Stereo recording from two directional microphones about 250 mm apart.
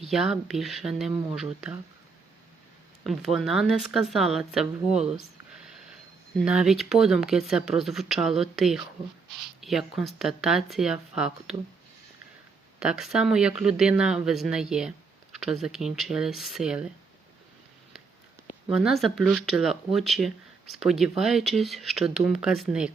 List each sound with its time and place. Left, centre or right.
0.0 s speech: centre
3.0 s speech: centre
6.4 s speech: centre
12.8 s speech: centre
18.7 s speech: centre